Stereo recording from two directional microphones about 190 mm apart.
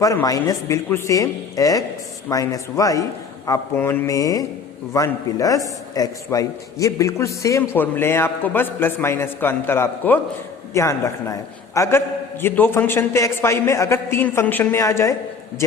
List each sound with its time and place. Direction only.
0.0 s a man's voice: 15° left (ahead or behind)